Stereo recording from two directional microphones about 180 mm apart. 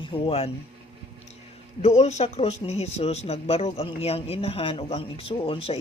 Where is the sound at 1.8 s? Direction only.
35° left (ahead or behind).